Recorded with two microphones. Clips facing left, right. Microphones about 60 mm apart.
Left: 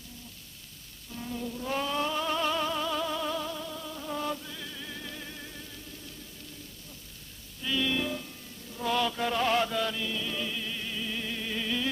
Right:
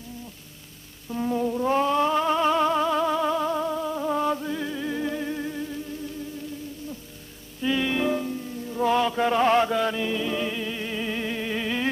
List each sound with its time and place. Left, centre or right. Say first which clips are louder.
1.1 s music: right 11 dB; right
7.6 s music: right 6 dB; right